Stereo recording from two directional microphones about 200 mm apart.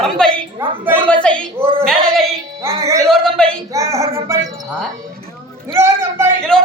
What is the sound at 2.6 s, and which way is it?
Music, 15° right (ahead or behind).